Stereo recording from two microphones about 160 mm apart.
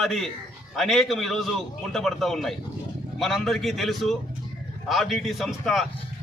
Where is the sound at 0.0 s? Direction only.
Centre (ahead or behind).